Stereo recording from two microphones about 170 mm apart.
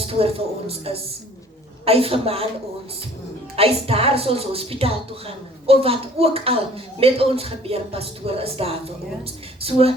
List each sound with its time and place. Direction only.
0.1 s a woman's voice: 35° right (ahead or behind)
1.8 s a woman's voice: 35° right (ahead or behind)
3.5 s a woman's voice: 35° right (ahead or behind)